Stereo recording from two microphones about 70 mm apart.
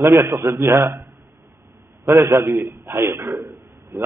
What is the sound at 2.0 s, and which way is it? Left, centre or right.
Speech, right.